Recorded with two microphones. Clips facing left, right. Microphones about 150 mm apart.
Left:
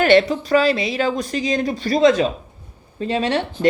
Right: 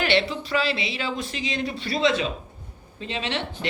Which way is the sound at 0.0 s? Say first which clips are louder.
Left 9 dB; 45° left (ahead or behind).